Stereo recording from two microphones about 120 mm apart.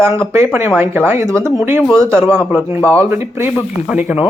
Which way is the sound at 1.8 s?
10° left (ahead or behind).